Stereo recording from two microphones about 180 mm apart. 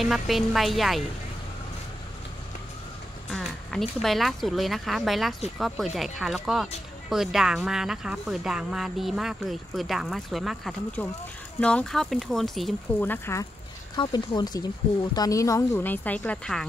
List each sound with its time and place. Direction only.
0.0 s speech: centre (ahead or behind)
3.3 s speech: centre (ahead or behind)
13.0 s a woman's voice: 10° left (ahead or behind)
13.9 s a woman's voice: 25° left (ahead or behind); by 16.6 s 5° left (ahead or behind)